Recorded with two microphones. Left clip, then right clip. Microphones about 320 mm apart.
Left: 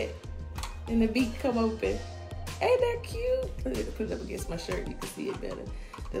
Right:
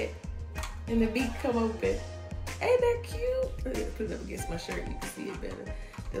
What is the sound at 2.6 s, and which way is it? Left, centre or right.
Speech, centre.